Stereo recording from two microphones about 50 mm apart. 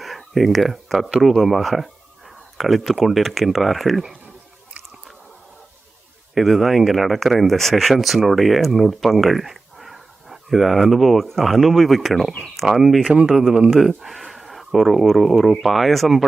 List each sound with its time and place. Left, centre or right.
0.0 s a sound: centre
1.2 s speech: centre
6.3 s speech: centre
13.0 s speech: right
13.7 s speech: centre